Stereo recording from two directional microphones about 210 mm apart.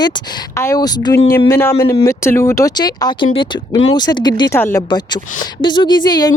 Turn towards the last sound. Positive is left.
turn(degrees=20)  # may be behind; listen again after turning